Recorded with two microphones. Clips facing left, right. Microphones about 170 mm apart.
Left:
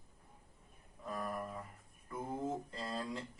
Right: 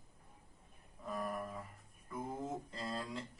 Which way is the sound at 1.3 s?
10° left (ahead or behind).